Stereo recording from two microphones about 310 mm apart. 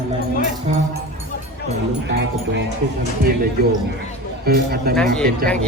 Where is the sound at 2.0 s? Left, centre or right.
Right.